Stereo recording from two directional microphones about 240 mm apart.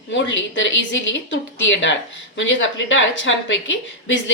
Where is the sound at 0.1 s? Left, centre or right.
Left.